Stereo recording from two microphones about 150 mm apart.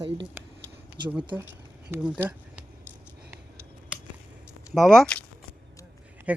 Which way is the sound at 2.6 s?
5° right (ahead or behind).